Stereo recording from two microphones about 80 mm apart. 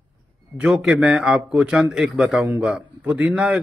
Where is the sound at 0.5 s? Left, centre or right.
Centre.